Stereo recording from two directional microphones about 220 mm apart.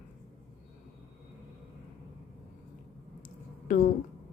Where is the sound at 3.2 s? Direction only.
35° left (ahead or behind).